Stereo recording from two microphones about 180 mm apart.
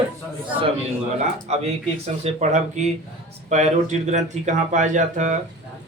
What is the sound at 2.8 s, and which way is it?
A man's voice, 40° right (ahead or behind).